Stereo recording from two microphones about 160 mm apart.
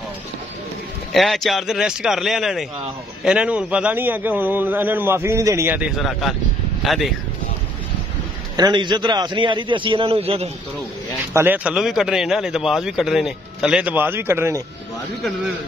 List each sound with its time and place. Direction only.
1.1 s a man's voice: centre (ahead or behind)
6.8 s a sound: centre (ahead or behind)
8.5 s a man's voice: 25° right (ahead or behind)
11.3 s speech: 10° right (ahead or behind)